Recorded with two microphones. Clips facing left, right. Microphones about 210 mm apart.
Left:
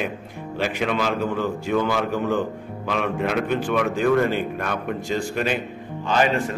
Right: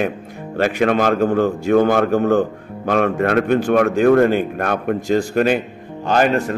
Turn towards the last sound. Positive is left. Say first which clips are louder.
# right 4 dB
turn(degrees=-50)  # may be behind; listen again after turning